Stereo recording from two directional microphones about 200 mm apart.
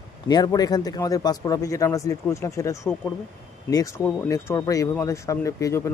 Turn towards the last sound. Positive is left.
turn(degrees=15)  # may be behind; listen again after turning